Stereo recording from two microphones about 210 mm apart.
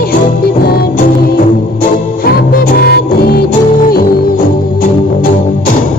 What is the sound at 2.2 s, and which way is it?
Music, 45° left (ahead or behind).